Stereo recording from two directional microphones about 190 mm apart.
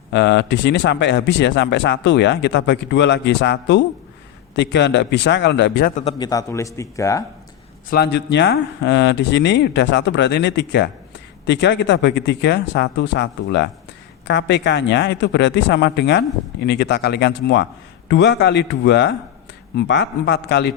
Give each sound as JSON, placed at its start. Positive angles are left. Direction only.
{"t": 0.1, "sound": "speech", "side_deg": 65}
{"t": 6.1, "sound": "a man's voice", "side_deg": 20}
{"t": 7.9, "sound": "a man's voice", "side_deg": 55}